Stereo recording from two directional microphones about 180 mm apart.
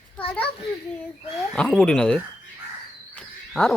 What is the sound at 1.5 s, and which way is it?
Speech, 5° left (ahead or behind).